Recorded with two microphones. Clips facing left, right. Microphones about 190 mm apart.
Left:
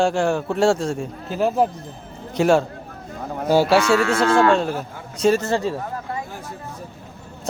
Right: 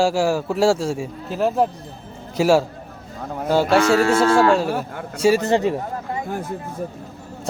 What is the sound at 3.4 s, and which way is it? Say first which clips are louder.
Speech: left 1 dB; 10° left (ahead or behind).